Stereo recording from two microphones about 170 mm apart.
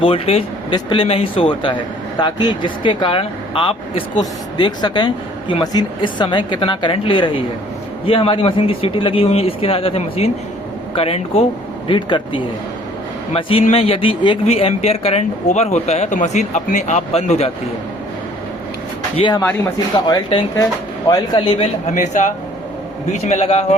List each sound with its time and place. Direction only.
0.0 s speech: 35° left (ahead or behind)
19.1 s speech: 30° left (ahead or behind)
21.9 s speech: 45° left (ahead or behind)